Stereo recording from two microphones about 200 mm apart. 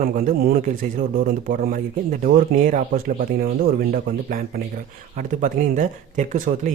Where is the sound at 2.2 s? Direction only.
40° right (ahead or behind).